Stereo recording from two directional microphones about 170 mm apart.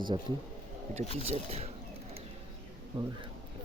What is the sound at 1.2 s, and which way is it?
Speech, 35° right (ahead or behind).